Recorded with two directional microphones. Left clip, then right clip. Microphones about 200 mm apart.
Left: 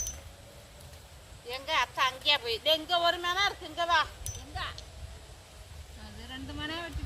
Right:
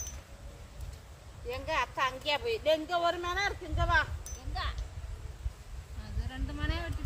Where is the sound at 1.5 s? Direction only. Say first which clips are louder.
Left 2 dB; 55° right (ahead or behind).